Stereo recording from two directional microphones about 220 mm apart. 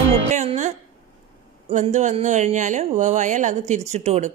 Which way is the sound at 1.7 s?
30° right (ahead or behind).